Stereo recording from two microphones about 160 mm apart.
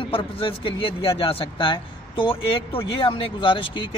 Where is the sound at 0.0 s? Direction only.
35° left (ahead or behind).